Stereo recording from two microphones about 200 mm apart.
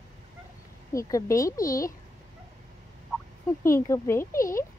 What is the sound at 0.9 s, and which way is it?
Speech, 15° left (ahead or behind).